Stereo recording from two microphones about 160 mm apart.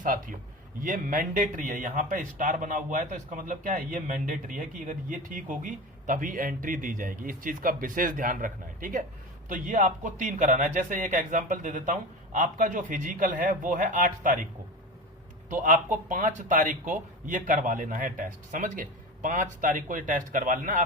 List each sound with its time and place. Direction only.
0.0 s speech: 60° right (ahead or behind)
15.4 s speech: 55° right (ahead or behind)